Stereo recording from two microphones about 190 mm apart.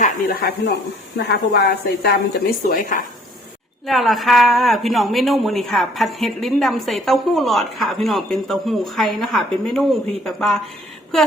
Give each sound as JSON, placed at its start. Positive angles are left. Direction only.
{"t": 0.0, "sound": "speech", "side_deg": 50}
{"t": 3.8, "sound": "a woman's voice", "side_deg": 0}